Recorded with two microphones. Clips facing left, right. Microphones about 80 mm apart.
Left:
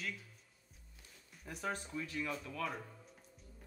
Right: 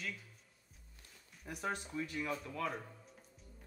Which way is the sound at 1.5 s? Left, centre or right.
Centre.